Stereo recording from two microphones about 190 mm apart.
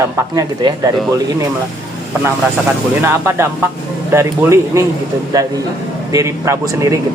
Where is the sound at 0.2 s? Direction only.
20° right (ahead or behind).